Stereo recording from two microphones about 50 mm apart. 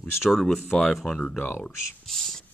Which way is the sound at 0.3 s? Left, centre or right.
Centre.